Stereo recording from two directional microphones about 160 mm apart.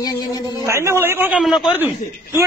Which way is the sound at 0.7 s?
15° right (ahead or behind).